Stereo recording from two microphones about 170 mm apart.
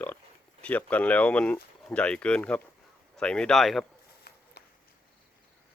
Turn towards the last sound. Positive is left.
turn(degrees=70)  # may be behind; listen again after turning